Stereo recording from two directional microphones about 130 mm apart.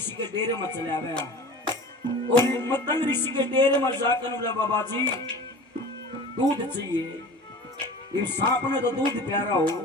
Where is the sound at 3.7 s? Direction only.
20° left (ahead or behind).